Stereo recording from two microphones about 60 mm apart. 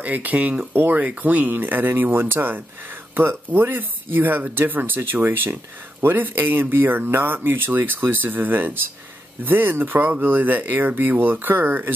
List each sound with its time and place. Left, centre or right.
0.0 s speech: right